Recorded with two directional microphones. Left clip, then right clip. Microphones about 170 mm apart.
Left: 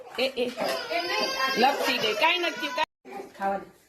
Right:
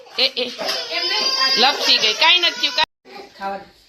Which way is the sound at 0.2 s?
5° left (ahead or behind).